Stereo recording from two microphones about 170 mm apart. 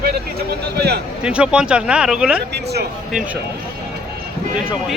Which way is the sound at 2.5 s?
75° right (ahead or behind).